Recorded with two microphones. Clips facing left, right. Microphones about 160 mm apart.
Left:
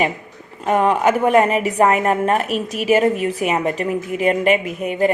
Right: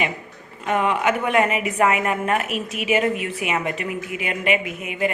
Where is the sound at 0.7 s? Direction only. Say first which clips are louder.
Left 5 dB; 40° left (ahead or behind).